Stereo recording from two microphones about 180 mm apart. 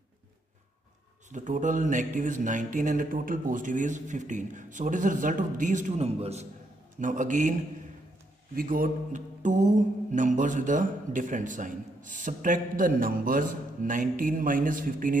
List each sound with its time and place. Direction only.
1.3 s music: 45° right (ahead or behind)
7.0 s music: 45° right (ahead or behind)
8.5 s music: 50° right (ahead or behind)